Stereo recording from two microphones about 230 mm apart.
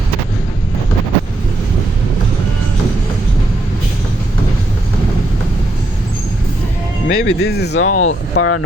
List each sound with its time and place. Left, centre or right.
7.1 s speech: left
7.9 s speech: left